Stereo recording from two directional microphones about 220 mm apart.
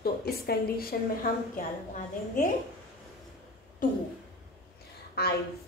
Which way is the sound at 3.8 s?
40° left (ahead or behind).